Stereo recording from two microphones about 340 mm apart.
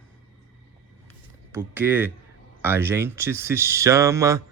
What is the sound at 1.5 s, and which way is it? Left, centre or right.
Speech, centre.